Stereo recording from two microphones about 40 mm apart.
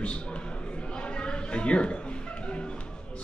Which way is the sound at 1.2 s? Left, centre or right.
Left.